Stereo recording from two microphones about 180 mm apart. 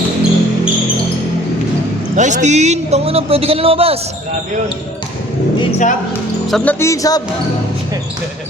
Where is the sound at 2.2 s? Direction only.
40° right (ahead or behind).